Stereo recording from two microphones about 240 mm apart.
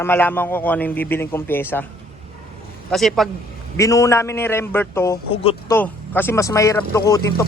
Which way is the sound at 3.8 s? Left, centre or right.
Centre.